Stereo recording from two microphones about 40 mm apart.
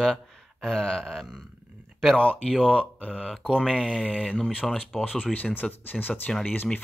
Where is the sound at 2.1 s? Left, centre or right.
Left.